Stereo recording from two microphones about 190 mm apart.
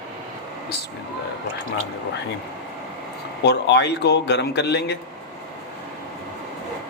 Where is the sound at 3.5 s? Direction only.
65° left (ahead or behind).